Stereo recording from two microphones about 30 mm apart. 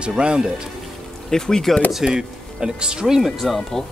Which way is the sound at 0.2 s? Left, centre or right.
Right.